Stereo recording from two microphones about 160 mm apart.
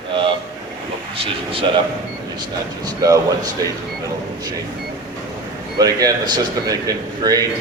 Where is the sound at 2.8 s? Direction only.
20° right (ahead or behind).